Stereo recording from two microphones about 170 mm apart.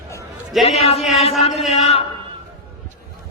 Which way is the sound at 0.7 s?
35° left (ahead or behind).